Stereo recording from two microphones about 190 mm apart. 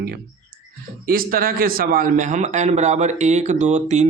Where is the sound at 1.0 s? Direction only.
50° right (ahead or behind).